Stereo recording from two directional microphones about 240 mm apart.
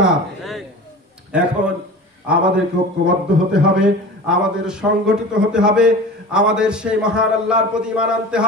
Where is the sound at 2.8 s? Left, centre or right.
Centre.